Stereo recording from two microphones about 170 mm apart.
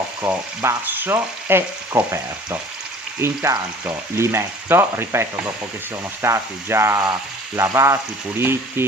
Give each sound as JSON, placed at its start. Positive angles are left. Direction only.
{"t": 0.2, "sound": "frying", "side_deg": -15}